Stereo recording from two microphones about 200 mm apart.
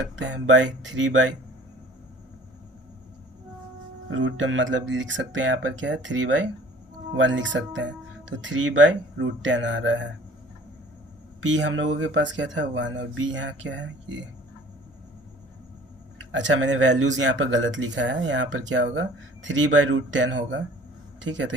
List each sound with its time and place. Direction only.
0.2 s speech: 65° right (ahead or behind)
4.1 s speech: 70° right (ahead or behind)
11.4 s speech: 65° right (ahead or behind)
16.3 s speech: 65° right (ahead or behind)